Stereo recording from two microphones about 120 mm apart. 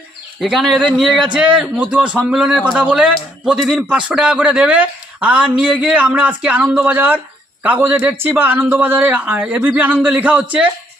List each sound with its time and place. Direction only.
0.3 s a man's voice: centre (ahead or behind)